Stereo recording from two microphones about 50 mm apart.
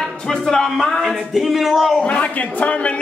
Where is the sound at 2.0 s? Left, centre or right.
Left.